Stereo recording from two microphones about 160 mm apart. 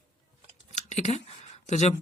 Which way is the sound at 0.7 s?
50° left (ahead or behind).